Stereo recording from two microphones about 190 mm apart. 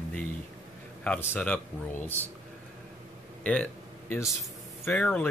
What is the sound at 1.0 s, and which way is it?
Speech, 5° left (ahead or behind).